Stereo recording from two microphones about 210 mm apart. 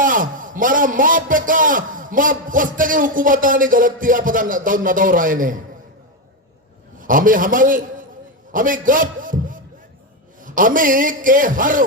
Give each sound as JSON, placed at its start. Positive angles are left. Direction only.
{"t": 0.0, "sound": "a man's voice", "side_deg": -40}
{"t": 7.0, "sound": "a man's voice", "side_deg": -40}